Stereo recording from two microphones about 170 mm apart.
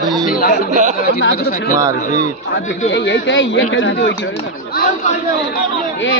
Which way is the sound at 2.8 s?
90° left.